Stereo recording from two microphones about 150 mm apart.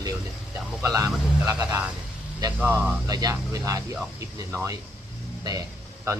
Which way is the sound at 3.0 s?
25° right (ahead or behind).